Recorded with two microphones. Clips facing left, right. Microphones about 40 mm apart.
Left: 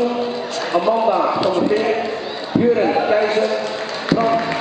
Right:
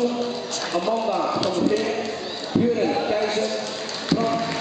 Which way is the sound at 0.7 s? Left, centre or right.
Centre.